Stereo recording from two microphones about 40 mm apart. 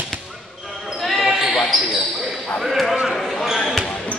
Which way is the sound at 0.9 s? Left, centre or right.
Centre.